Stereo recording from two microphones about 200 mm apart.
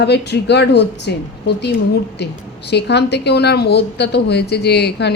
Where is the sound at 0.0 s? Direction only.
55° left (ahead or behind).